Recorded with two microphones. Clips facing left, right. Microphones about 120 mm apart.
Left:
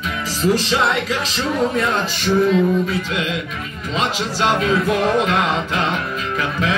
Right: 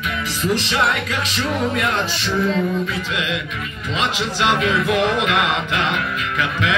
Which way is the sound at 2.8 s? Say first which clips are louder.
Left 2 dB; 45° left (ahead or behind).